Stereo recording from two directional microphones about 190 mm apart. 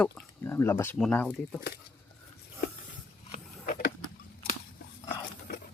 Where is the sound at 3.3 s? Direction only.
45° left (ahead or behind).